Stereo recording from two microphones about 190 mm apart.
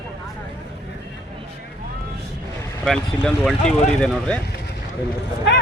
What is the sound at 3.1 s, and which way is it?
Speech, 5° left (ahead or behind).